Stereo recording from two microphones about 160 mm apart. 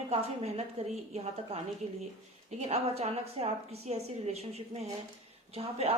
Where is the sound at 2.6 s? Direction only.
40° right (ahead or behind).